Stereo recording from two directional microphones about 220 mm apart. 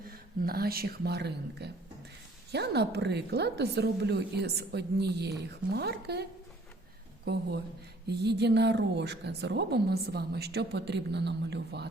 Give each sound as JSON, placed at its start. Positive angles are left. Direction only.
{"t": 0.1, "sound": "a woman's voice", "side_deg": -45}
{"t": 8.0, "sound": "a woman's voice", "side_deg": -50}